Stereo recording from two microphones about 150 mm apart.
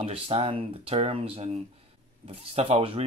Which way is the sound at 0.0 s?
40° right (ahead or behind).